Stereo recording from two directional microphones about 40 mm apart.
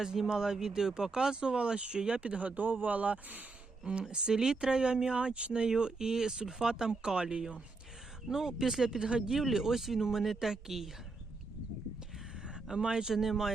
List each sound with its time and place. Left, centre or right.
0.0 s speech: centre; by 3.4 s right
3.8 s speech: right
9.3 s speech: centre
12.6 s speech: centre